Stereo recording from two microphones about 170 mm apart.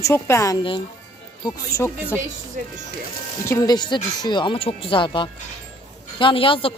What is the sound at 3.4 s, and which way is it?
A woman's voice, 20° left (ahead or behind).